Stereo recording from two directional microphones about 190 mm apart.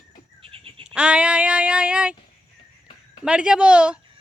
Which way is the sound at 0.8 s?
5° right (ahead or behind).